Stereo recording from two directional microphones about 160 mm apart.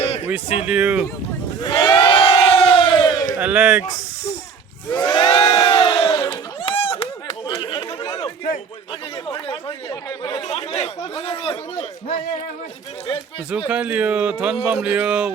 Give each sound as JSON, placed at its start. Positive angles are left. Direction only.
{"t": 0.5, "sound": "speech", "side_deg": -10}
{"t": 1.6, "sound": "crowd", "side_deg": 30}
{"t": 3.3, "sound": "speech", "side_deg": -10}
{"t": 4.9, "sound": "crowd", "side_deg": 30}
{"t": 9.3, "sound": "a sound", "side_deg": 30}
{"t": 10.1, "sound": "chatter", "side_deg": 25}
{"t": 10.5, "sound": "a man's voice", "side_deg": 40}
{"t": 13.7, "sound": "speech", "side_deg": -10}